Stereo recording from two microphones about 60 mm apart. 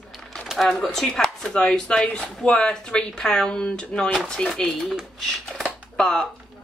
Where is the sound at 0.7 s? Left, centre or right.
Centre.